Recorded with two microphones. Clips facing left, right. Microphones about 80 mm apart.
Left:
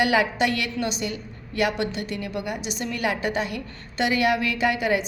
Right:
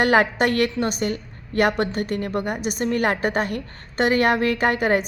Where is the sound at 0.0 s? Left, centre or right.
Right.